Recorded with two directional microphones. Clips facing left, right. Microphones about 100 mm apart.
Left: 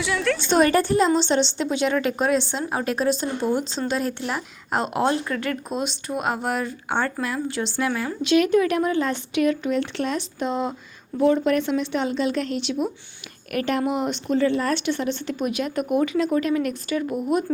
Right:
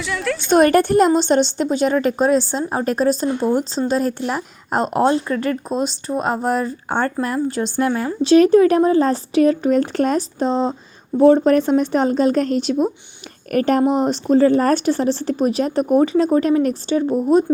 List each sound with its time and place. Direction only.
0.0 s a woman's voice: centre (ahead or behind)
0.5 s a woman's voice: 55° right (ahead or behind); by 17.4 s 30° right (ahead or behind)